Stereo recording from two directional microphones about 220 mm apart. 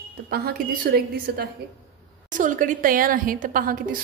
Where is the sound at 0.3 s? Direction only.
45° right (ahead or behind).